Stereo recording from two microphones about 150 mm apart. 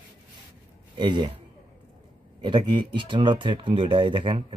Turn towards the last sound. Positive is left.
turn(degrees=-35)  # may be behind; listen again after turning